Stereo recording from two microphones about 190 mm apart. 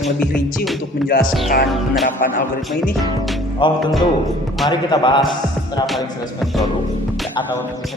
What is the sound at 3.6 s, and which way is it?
A man's voice, 25° left (ahead or behind).